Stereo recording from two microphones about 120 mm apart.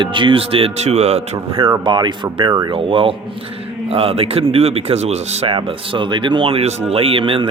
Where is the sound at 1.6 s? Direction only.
40° right (ahead or behind).